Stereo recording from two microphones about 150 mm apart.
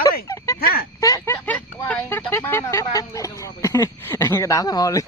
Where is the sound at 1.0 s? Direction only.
20° left (ahead or behind).